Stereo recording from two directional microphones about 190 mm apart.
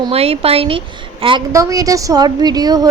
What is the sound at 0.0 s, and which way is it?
A woman's voice, 30° right (ahead or behind).